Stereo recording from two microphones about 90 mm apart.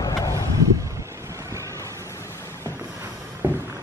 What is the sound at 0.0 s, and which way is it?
Vehicle, 40° left (ahead or behind).